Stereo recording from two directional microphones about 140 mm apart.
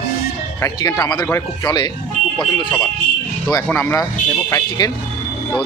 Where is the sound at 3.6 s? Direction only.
15° left (ahead or behind).